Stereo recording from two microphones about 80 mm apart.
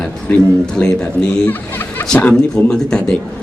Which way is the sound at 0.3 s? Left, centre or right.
Centre.